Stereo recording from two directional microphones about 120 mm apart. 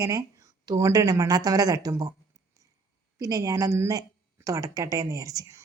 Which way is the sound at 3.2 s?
25° right (ahead or behind).